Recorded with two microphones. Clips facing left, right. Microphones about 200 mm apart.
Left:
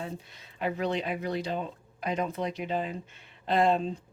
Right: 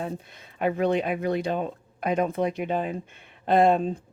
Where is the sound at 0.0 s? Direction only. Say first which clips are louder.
Right 5 dB; 55° right (ahead or behind).